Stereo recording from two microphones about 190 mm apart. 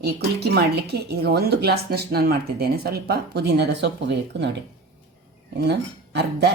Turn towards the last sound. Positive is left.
turn(degrees=-60)  # may be behind; listen again after turning